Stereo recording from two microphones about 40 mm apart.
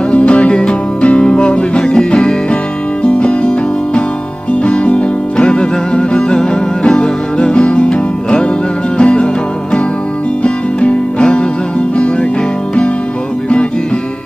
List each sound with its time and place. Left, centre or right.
0.1 s music: left
10.4 s music: left